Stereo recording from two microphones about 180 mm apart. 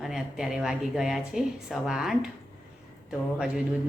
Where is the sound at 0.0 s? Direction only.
Centre (ahead or behind).